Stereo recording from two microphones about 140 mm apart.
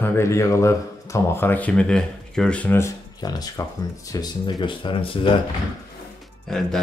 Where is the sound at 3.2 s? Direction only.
30° left (ahead or behind).